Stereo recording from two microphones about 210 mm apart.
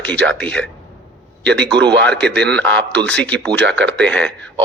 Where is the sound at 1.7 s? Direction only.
55° right (ahead or behind).